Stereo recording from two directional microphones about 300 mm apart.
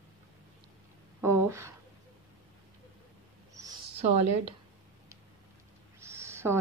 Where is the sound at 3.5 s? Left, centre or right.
Centre.